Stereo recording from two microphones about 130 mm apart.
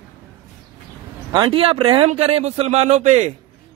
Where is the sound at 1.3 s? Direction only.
40° right (ahead or behind); by 3.3 s 65° right (ahead or behind).